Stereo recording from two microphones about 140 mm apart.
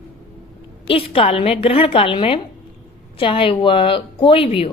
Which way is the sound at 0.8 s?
40° left (ahead or behind).